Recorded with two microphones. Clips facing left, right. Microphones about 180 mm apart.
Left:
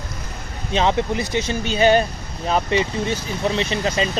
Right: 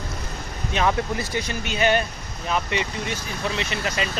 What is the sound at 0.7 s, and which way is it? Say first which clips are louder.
Speech: left 4 dB; 20° left (ahead or behind).